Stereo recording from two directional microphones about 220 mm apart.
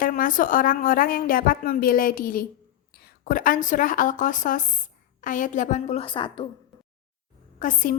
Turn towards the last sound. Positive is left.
turn(degrees=40)  # may be behind; listen again after turning